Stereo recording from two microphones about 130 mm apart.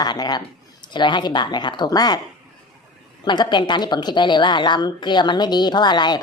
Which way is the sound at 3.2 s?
35° left (ahead or behind).